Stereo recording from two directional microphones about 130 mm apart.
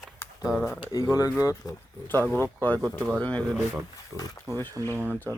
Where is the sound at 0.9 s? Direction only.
25° left (ahead or behind).